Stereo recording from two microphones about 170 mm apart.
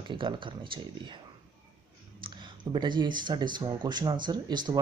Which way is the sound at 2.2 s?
25° right (ahead or behind).